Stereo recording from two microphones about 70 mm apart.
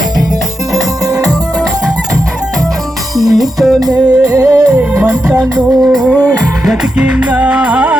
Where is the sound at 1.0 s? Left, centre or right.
Right.